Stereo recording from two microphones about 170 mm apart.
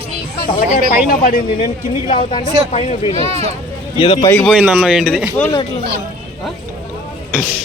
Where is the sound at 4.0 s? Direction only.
40° left (ahead or behind).